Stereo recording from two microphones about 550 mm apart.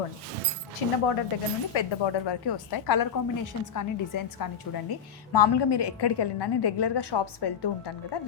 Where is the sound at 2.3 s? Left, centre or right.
Left.